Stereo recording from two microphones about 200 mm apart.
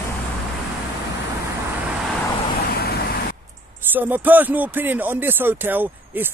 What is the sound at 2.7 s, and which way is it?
Vehicle, 50° left (ahead or behind).